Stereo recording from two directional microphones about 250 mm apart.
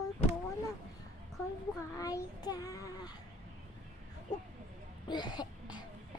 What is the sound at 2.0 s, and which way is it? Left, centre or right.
A child's voice, centre.